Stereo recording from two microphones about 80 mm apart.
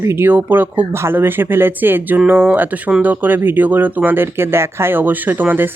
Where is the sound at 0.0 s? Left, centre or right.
Right.